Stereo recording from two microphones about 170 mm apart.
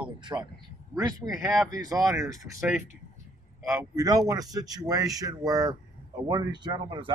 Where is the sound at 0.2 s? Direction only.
25° right (ahead or behind).